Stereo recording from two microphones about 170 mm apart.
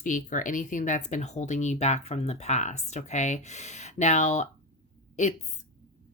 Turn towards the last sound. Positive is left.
turn(degrees=40)  # may be behind; listen again after turning